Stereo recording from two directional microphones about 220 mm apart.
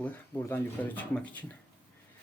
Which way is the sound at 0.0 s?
10° left (ahead or behind).